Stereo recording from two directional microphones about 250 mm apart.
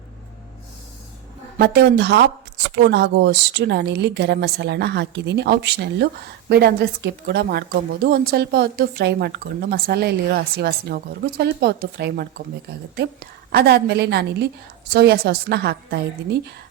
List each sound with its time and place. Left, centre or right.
1.5 s a woman's voice: right
13.5 s a woman's voice: right